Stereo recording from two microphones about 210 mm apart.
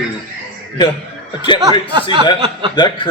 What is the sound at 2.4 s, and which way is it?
Speech, 25° right (ahead or behind).